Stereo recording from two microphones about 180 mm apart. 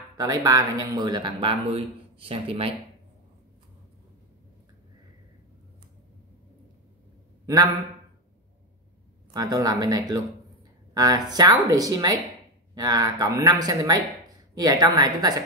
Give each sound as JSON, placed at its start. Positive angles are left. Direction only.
{"t": 0.2, "sound": "speech", "side_deg": -20}
{"t": 7.4, "sound": "a man's voice", "side_deg": -20}
{"t": 9.3, "sound": "speech", "side_deg": -20}